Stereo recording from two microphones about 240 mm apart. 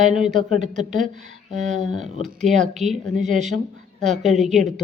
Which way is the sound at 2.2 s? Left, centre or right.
Centre.